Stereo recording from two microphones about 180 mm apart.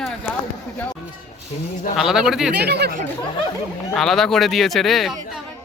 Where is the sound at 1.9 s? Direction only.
5° right (ahead or behind).